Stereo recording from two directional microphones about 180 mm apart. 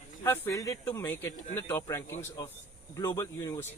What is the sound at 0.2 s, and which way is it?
A man's voice, 15° left (ahead or behind).